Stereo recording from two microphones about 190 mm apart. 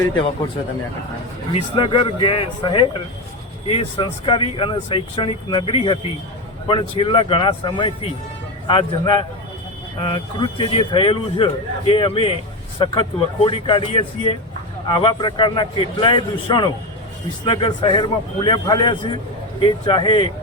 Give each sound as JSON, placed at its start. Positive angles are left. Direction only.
{"t": 1.5, "sound": "speech", "side_deg": 30}